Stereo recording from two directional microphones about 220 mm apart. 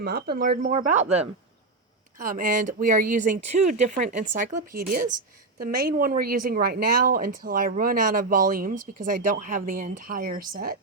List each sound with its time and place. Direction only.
0.0 s speech: 45° right (ahead or behind)